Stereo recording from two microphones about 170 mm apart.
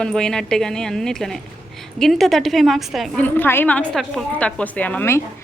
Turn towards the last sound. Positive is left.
turn(degrees=10)  # may be behind; listen again after turning